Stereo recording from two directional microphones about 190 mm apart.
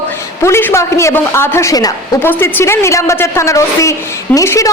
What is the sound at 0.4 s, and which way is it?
A woman's voice, 15° left (ahead or behind).